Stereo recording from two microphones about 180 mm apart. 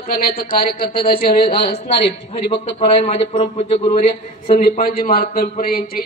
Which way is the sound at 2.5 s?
30° left (ahead or behind).